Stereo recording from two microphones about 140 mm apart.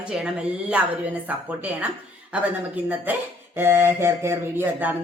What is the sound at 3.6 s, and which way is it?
Speech, 15° right (ahead or behind).